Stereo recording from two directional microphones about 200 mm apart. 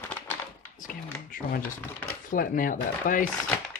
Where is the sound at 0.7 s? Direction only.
40° left (ahead or behind).